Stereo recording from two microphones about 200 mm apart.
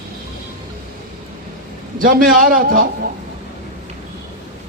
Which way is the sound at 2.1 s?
45° right (ahead or behind).